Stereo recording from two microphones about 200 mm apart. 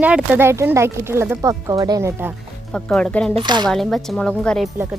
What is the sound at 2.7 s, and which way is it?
Speech, 5° left (ahead or behind).